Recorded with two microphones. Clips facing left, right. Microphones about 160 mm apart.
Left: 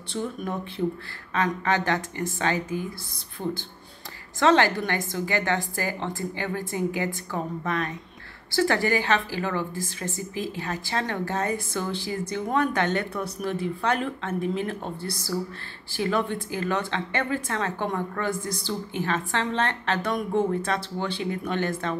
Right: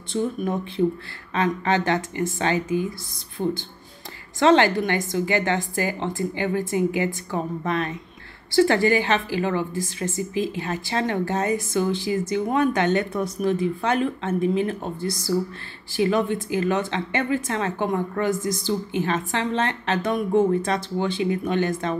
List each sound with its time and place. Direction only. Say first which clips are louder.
1.3 s a woman's voice: right 3 dB; 20° right (ahead or behind)
15.9 s a woman's voice: right 5 dB; 15° right (ahead or behind)